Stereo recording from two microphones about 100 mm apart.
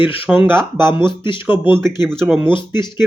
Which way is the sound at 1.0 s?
55° left (ahead or behind).